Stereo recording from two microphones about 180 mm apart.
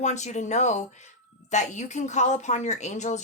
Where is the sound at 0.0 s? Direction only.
40° left (ahead or behind).